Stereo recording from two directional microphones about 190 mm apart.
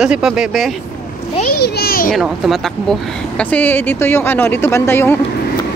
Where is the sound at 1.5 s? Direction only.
55° left (ahead or behind).